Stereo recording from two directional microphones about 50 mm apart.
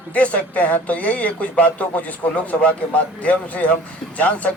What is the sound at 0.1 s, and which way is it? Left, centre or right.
Speech, left.